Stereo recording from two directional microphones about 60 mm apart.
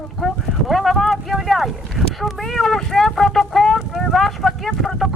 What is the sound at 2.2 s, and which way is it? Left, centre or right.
Vehicle, centre.